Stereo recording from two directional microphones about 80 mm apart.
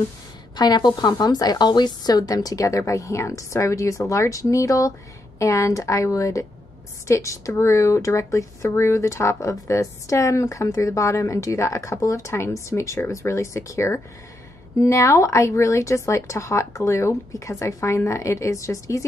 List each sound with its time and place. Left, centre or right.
0.6 s a woman's voice: left